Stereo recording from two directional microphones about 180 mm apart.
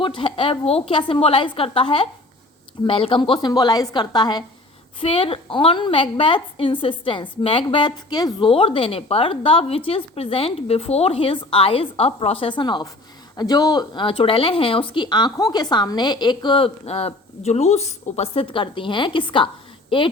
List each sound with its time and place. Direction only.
0.0 s a woman's voice: 30° left (ahead or behind)